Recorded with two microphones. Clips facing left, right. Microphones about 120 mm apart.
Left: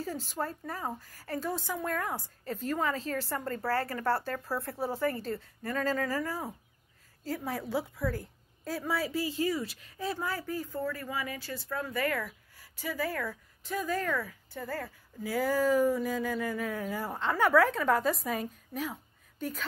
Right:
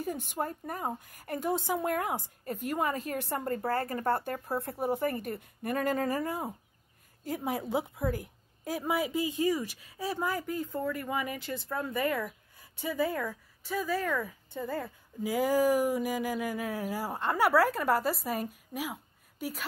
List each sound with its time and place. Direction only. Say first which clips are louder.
0.0 s a woman's voice: right 1 dB; 20° right (ahead or behind)
13.3 s speech: right 1 dB; 5° right (ahead or behind)